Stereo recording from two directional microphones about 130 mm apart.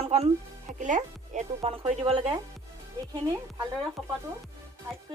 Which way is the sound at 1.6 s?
50° right (ahead or behind).